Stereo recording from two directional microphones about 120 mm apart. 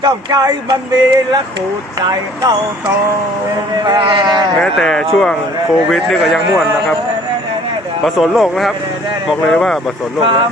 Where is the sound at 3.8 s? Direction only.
40° right (ahead or behind).